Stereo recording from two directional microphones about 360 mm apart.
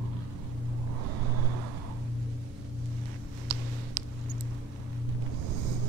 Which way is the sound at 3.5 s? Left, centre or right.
Right.